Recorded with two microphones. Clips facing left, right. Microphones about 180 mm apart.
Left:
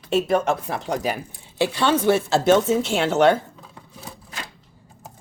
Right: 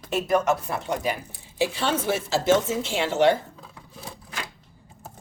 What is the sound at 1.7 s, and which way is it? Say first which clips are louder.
Speech: left 6 dB; 80° left.